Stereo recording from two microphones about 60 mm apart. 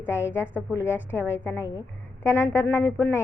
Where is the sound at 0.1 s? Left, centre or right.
Left.